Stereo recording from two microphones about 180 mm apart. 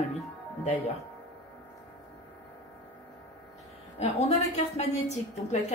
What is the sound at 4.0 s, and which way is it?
Speech, 35° left (ahead or behind).